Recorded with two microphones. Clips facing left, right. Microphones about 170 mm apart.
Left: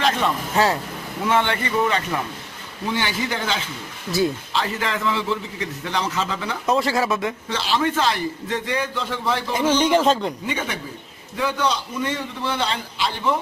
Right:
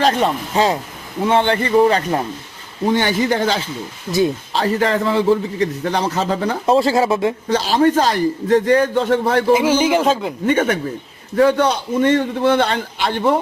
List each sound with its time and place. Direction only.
0.0 s a man's voice: 35° right (ahead or behind)
0.5 s speech: 20° right (ahead or behind)
1.2 s a man's voice: 30° right (ahead or behind)
6.7 s speech: 30° right (ahead or behind)
7.4 s a man's voice: 40° right (ahead or behind)
9.5 s speech: 10° right (ahead or behind)
10.4 s a man's voice: 55° right (ahead or behind)